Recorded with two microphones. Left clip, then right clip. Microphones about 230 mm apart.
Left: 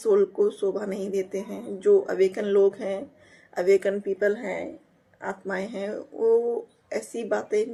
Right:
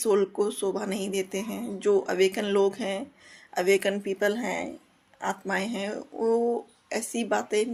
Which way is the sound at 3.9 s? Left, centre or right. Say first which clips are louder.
Left 2 dB; right.